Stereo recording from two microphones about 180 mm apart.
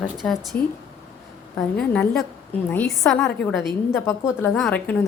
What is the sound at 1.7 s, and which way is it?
Speech, 5° left (ahead or behind).